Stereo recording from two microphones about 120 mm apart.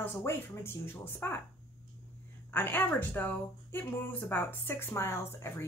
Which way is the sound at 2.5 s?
15° left (ahead or behind).